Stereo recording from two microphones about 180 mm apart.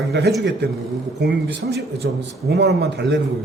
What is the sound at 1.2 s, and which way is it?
A man's voice, 70° right (ahead or behind).